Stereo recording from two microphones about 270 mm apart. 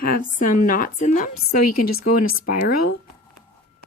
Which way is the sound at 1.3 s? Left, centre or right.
Left.